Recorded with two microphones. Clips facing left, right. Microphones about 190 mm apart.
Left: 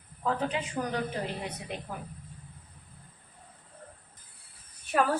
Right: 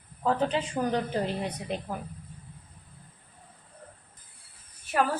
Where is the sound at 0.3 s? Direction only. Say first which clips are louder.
Right 4 dB; 35° right (ahead or behind).